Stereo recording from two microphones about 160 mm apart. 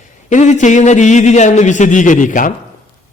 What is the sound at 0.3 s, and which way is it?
A man's voice, 50° left (ahead or behind).